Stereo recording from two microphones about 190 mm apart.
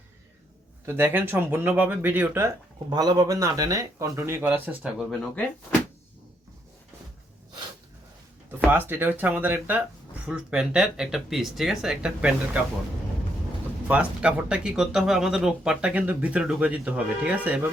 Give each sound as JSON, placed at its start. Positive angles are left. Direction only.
{"t": 0.9, "sound": "speech", "side_deg": -10}
{"t": 8.5, "sound": "speech", "side_deg": -10}
{"t": 13.8, "sound": "speech", "side_deg": -5}